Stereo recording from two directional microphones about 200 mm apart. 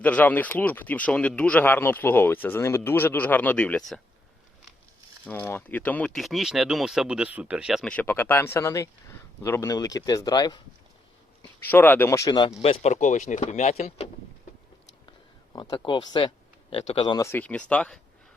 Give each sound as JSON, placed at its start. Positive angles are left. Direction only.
{"t": 0.0, "sound": "speech", "side_deg": 10}
{"t": 5.2, "sound": "speech", "side_deg": 10}
{"t": 11.4, "sound": "speech", "side_deg": 10}
{"t": 12.6, "sound": "speech", "side_deg": 30}
{"t": 15.5, "sound": "speech", "side_deg": 20}